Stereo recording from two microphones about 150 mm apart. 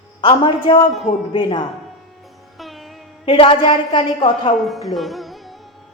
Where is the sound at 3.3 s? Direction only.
35° left (ahead or behind).